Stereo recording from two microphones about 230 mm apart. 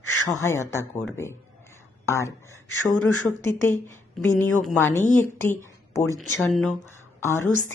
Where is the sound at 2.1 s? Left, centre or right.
Centre.